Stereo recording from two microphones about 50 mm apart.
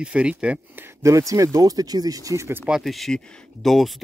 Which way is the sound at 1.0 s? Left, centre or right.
Right.